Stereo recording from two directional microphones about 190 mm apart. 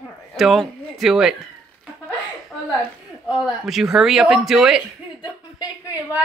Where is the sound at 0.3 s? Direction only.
Centre (ahead or behind).